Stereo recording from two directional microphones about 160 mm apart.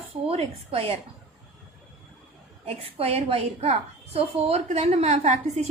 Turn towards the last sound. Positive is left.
turn(degrees=-45)  # may be behind; listen again after turning